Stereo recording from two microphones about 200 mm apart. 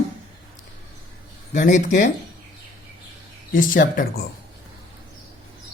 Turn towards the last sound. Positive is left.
turn(degrees=40)  # may be behind; listen again after turning